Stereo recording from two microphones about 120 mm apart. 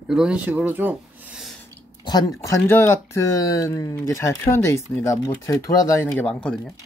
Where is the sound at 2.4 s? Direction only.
20° left (ahead or behind).